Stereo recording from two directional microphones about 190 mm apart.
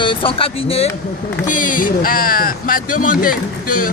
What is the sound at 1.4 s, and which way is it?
Speech, 45° left (ahead or behind).